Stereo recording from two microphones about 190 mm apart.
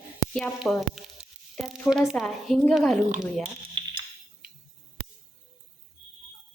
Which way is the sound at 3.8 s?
25° right (ahead or behind).